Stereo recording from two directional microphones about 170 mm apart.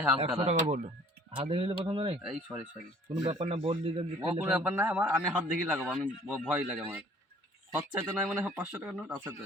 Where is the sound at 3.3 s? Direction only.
35° right (ahead or behind).